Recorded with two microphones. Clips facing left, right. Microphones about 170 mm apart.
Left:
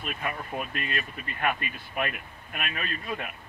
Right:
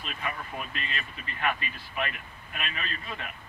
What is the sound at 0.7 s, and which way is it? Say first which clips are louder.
A man's voice: left 4 dB; 55° left (ahead or behind).